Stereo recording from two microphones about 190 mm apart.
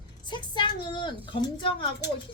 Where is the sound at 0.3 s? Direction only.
25° left (ahead or behind).